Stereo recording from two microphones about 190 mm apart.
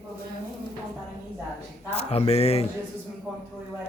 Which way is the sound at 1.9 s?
30° left (ahead or behind).